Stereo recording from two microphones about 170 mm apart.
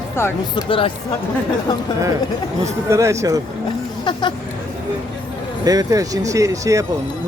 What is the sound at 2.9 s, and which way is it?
Speech, 15° right (ahead or behind).